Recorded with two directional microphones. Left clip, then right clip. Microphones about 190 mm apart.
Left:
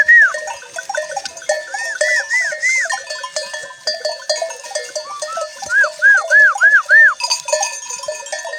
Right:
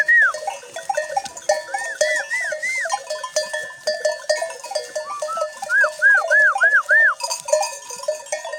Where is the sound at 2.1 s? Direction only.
25° right (ahead or behind).